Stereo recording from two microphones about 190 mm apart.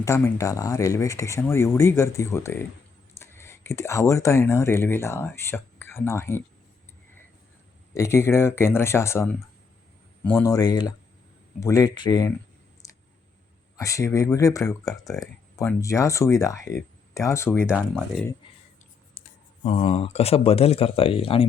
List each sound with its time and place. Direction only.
0.0 s speech: 15° left (ahead or behind)
7.9 s speech: 15° left (ahead or behind)
12.8 s clicking: 15° left (ahead or behind)
13.7 s speech: 15° left (ahead or behind)
17.7 s speech: centre (ahead or behind)
19.2 s clicking: 45° left (ahead or behind)
19.6 s speech: 30° left (ahead or behind)